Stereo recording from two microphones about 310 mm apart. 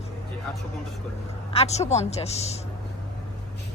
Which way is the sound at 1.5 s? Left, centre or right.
Left.